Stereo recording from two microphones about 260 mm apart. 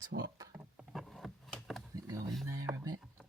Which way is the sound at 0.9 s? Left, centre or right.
Centre.